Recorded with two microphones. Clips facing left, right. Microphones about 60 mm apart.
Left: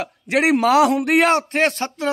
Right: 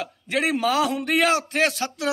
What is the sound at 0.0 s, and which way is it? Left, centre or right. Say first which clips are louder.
A man's voice: left 6 dB; left.